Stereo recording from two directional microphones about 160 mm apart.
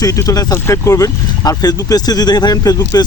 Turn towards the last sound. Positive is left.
turn(degrees=25)  # may be behind; listen again after turning